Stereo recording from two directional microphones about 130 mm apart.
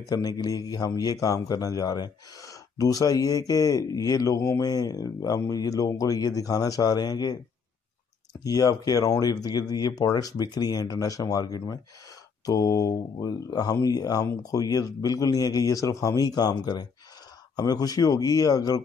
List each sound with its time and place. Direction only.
0.1 s a man's voice: 30° left (ahead or behind)